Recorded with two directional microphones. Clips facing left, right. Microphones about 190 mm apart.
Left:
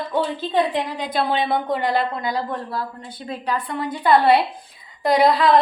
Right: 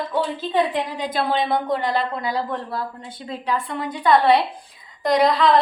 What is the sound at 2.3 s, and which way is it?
Speech, 25° right (ahead or behind).